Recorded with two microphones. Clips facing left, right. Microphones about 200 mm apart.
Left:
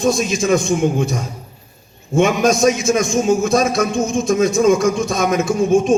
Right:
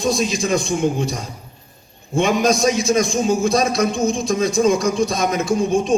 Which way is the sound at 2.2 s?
35° right (ahead or behind).